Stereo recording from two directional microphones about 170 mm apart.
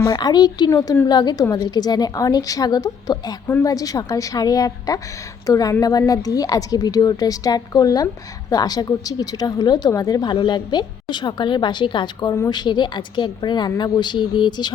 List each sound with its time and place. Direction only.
0.1 s a woman's voice: 25° left (ahead or behind)